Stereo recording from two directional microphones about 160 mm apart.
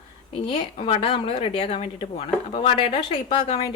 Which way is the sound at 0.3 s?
35° left (ahead or behind).